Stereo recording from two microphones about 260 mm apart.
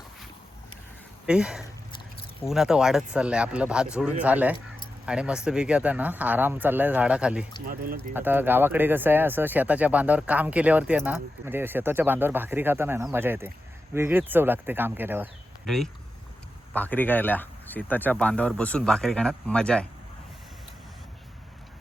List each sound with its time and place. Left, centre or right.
1.3 s speech: centre
7.7 s speech: right
8.1 s speech: centre